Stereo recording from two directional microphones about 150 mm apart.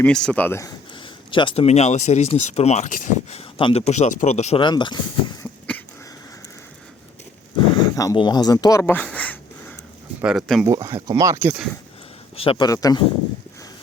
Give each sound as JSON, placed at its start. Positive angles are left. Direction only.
{"t": 0.0, "sound": "speech", "side_deg": 5}
{"t": 0.9, "sound": "speech", "side_deg": 35}
{"t": 3.6, "sound": "speech", "side_deg": 40}
{"t": 4.6, "sound": "speech", "side_deg": 30}
{"t": 7.8, "sound": "a sound", "side_deg": 25}
{"t": 10.2, "sound": "speech", "side_deg": -5}
{"t": 10.7, "sound": "speech", "side_deg": -20}
{"t": 12.4, "sound": "speech", "side_deg": 35}
{"t": 12.6, "sound": "speech", "side_deg": 25}